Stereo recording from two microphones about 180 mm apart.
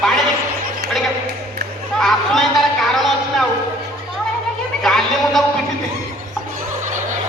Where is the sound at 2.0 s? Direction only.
Centre (ahead or behind).